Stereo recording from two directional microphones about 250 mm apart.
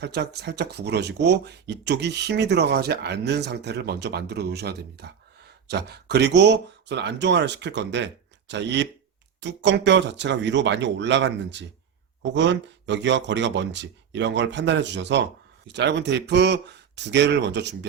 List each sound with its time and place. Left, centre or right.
0.0 s speech: right